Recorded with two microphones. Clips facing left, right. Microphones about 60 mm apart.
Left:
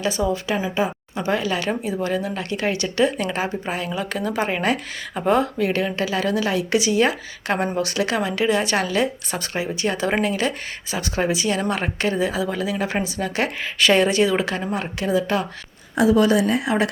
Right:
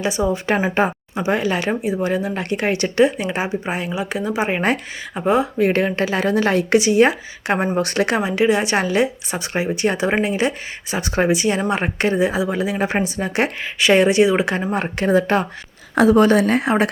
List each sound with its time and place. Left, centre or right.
0.0 s speech: right
0.4 s a woman's voice: right
1.1 s speech: right
3.2 s a woman's voice: centre
5.1 s a woman's voice: centre
5.5 s a woman's voice: right
7.8 s speech: right